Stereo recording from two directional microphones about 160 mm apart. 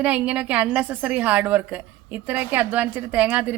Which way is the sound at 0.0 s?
10° right (ahead or behind).